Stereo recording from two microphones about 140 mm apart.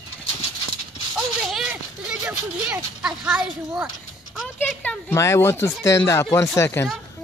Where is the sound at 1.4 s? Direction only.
5° right (ahead or behind).